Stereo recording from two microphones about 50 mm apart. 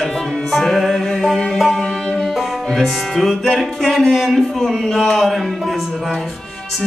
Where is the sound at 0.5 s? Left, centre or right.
Centre.